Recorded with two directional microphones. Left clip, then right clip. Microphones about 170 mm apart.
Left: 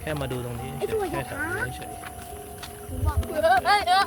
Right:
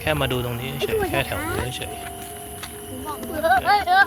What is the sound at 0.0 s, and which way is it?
Speech, 20° right (ahead or behind).